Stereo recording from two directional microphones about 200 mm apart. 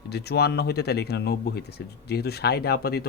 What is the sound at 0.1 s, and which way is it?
A man's voice, 55° left (ahead or behind).